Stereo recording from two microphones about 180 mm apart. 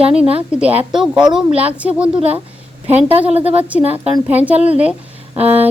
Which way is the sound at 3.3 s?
35° right (ahead or behind).